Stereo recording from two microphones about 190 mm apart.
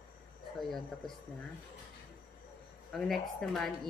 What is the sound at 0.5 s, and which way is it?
Speech, centre (ahead or behind).